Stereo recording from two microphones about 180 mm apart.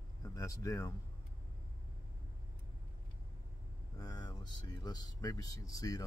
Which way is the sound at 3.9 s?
20° left (ahead or behind).